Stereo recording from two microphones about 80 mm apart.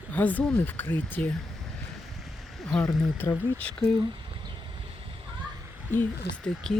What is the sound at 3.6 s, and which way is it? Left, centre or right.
Speech, centre.